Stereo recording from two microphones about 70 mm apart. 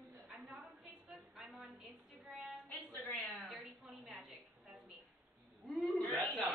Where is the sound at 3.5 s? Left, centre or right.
Centre.